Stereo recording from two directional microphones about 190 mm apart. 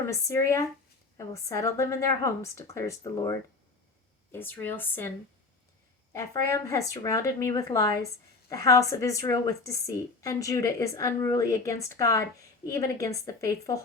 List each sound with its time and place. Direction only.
0.0 s a woman's voice: 15° left (ahead or behind)
6.1 s a woman's voice: 15° left (ahead or behind)